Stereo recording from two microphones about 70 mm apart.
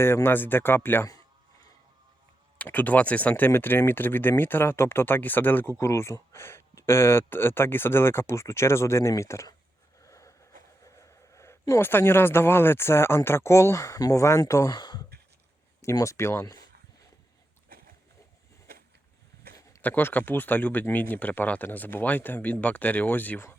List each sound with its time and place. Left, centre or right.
0.0 s speech: left
2.6 s speech: left
5.7 s speech: left
10.0 s a sound: left
11.8 s speech: left
14.7 s speech: left
16.0 s speech: left
19.8 s speech: left